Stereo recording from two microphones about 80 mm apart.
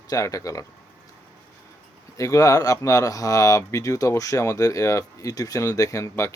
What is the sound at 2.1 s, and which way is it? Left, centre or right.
Speech, left.